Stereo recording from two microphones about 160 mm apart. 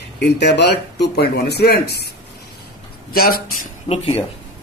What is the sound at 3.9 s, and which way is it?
Speech, 35° left (ahead or behind).